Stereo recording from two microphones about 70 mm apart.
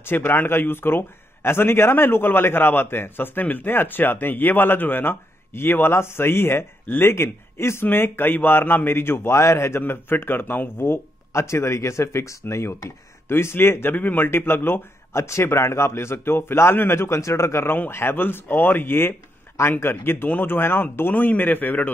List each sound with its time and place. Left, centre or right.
0.0 s a man's voice: left